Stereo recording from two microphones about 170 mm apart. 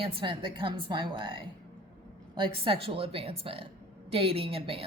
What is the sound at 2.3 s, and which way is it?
A woman's voice, 30° right (ahead or behind).